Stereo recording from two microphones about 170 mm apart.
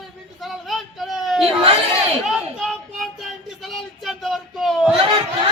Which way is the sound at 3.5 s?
Centre (ahead or behind).